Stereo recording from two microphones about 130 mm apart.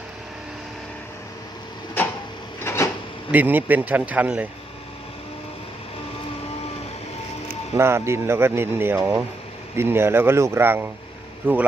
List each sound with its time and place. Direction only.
2.6 s a sound: 20° left (ahead or behind)
3.3 s speech: 15° right (ahead or behind)
7.8 s speech: 20° right (ahead or behind)